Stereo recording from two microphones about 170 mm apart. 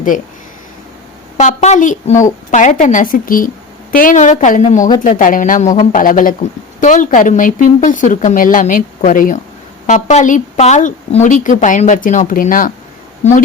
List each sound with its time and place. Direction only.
1.4 s speech: 45° left (ahead or behind)